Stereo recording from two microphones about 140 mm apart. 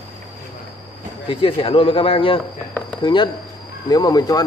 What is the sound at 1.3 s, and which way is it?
Speech, 40° left (ahead or behind).